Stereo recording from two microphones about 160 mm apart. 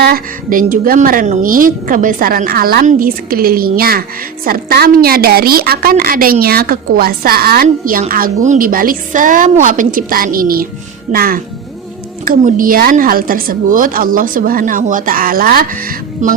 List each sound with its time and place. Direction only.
0.0 s a woman's voice: 65° right (ahead or behind)
6.4 s a woman's voice: 75° right (ahead or behind)